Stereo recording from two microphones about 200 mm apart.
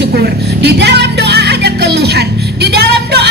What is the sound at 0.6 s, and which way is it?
Music, 55° right (ahead or behind).